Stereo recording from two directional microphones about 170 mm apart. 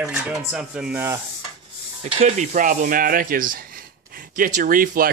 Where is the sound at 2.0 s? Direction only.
40° right (ahead or behind).